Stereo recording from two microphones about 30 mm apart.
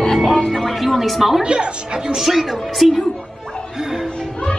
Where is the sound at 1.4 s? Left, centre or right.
Right.